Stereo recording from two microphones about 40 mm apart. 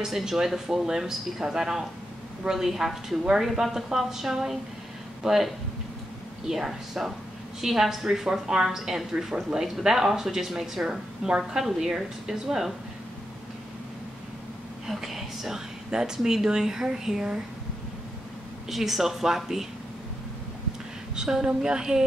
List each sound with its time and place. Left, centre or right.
0.0 s speech: centre
14.9 s a sound: centre
16.2 s speech: centre
18.7 s speech: centre
21.2 s speech: centre